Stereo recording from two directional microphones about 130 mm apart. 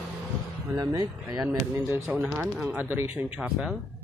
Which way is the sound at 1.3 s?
20° right (ahead or behind).